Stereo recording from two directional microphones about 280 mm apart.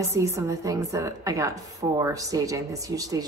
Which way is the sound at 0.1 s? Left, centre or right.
Centre.